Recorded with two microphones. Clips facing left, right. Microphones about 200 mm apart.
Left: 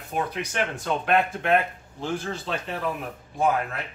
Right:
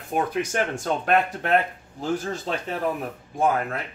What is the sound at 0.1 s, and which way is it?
Speech, 45° right (ahead or behind).